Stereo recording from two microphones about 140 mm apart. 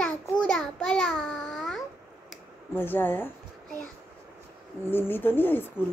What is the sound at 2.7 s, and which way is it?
Speech, 15° left (ahead or behind).